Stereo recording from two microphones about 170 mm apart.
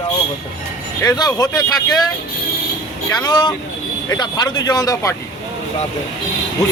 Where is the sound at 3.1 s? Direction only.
20° left (ahead or behind).